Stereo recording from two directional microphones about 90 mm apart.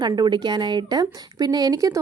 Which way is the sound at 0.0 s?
50° right (ahead or behind).